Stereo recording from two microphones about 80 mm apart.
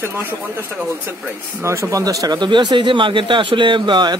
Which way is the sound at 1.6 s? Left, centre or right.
Right.